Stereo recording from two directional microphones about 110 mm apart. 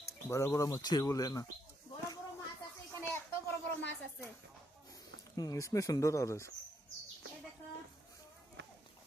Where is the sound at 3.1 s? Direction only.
20° left (ahead or behind).